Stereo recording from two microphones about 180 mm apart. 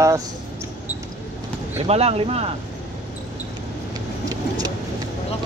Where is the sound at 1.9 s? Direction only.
35° right (ahead or behind).